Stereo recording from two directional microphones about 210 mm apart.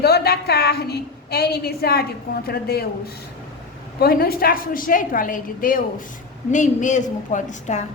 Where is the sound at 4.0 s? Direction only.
45° left (ahead or behind).